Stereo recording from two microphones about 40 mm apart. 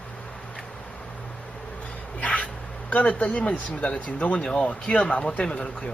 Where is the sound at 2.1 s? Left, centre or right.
Left.